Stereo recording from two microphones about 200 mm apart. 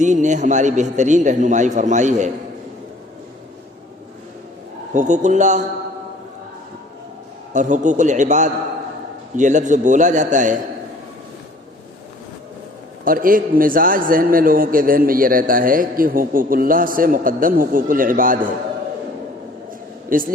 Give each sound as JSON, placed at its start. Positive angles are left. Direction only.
{"t": 0.0, "sound": "a man's voice", "side_deg": -35}
{"t": 4.9, "sound": "a man's voice", "side_deg": -35}
{"t": 7.5, "sound": "a man's voice", "side_deg": -40}
{"t": 13.1, "sound": "a man's voice", "side_deg": -45}
{"t": 20.1, "sound": "a man's voice", "side_deg": -45}